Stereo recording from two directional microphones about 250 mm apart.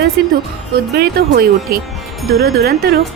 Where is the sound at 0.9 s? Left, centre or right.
Right.